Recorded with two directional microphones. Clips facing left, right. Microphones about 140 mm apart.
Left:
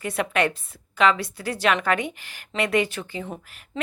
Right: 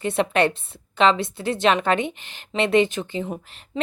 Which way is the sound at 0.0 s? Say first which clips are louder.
Right 4 dB; 25° right (ahead or behind).